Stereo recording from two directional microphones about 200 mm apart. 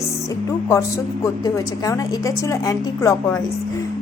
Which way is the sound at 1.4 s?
15° left (ahead or behind).